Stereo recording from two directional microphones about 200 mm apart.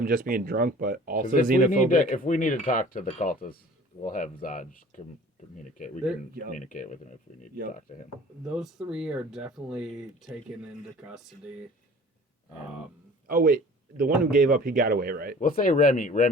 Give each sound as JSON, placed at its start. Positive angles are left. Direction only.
{"t": 0.0, "sound": "speech", "side_deg": -45}
{"t": 1.9, "sound": "cutlery", "side_deg": 40}
{"t": 8.4, "sound": "speech", "side_deg": -5}
{"t": 13.2, "sound": "speech", "side_deg": -45}
{"t": 15.4, "sound": "cutlery", "side_deg": 45}